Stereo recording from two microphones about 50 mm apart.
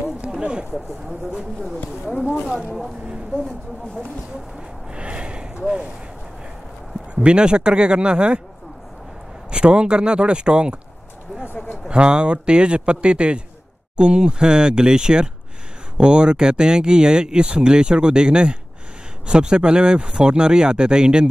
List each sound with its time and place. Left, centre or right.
0.4 s speech: centre
4.6 s gasp: right
7.2 s speech: centre
9.5 s speech: centre
11.4 s a sound: left
11.9 s speech: centre